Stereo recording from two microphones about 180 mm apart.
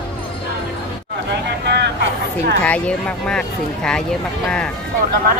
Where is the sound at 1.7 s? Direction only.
70° right (ahead or behind).